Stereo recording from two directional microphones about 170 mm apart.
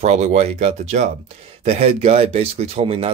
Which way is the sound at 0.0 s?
40° right (ahead or behind).